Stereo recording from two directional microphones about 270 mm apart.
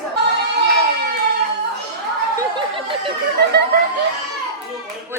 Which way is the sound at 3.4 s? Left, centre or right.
Right.